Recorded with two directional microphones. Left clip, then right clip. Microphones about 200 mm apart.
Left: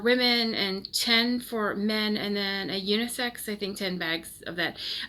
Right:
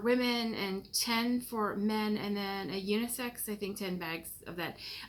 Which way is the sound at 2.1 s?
5° left (ahead or behind).